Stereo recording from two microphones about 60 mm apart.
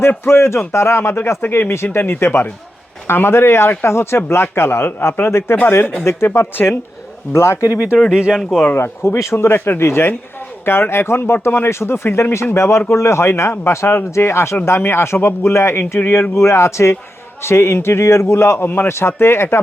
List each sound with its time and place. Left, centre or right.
0.3 s a man's voice: left
8.1 s speech: centre
8.7 s a man's voice: left